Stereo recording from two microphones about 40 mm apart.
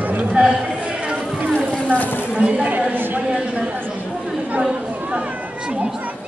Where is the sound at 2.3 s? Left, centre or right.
Right.